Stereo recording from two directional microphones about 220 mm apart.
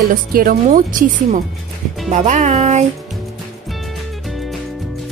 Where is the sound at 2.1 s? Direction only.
30° right (ahead or behind).